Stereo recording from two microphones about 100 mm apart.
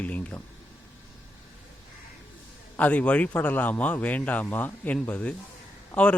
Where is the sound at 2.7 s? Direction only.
15° left (ahead or behind).